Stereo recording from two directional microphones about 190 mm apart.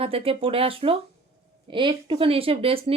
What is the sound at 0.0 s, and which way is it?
A woman's voice, 30° right (ahead or behind).